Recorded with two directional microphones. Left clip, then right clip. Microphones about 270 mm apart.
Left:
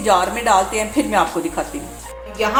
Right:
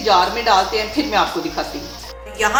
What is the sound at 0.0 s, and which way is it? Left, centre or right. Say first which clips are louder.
Speech: right 1 dB; left.